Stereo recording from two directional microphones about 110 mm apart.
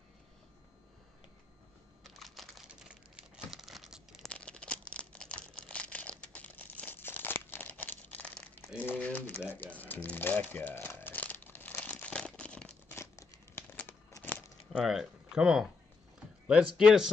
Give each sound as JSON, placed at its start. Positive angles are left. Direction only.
{"t": 2.0, "sound": "computer keyboard", "side_deg": 0}
{"t": 3.3, "sound": "crumpling", "side_deg": -5}
{"t": 4.3, "sound": "crumpling", "side_deg": 10}
{"t": 8.7, "sound": "a sound", "side_deg": 15}
{"t": 9.8, "sound": "crumpling", "side_deg": 15}
{"t": 12.8, "sound": "crumpling", "side_deg": 25}
{"t": 14.7, "sound": "speech", "side_deg": -5}
{"t": 16.7, "sound": "speech", "side_deg": -5}